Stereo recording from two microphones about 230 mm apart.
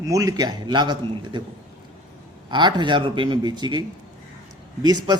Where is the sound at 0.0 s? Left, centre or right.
Centre.